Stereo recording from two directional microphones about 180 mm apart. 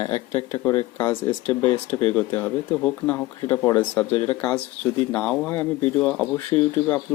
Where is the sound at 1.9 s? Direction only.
35° left (ahead or behind).